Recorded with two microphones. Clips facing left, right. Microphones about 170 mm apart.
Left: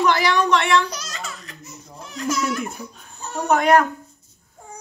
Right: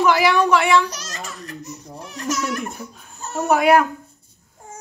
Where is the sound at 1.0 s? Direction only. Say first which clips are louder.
Right 1 dB; 40° right (ahead or behind).